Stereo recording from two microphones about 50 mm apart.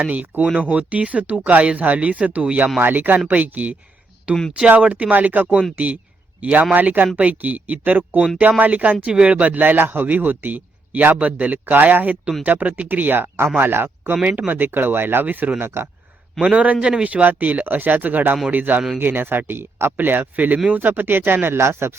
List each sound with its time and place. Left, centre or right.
0.1 s a man's voice: right
9.0 s a man's voice: right
14.3 s speech: right
16.4 s a man's voice: right